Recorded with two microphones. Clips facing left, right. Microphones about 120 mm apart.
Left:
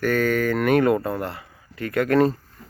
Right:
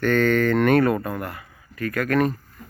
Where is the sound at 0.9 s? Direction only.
25° left (ahead or behind).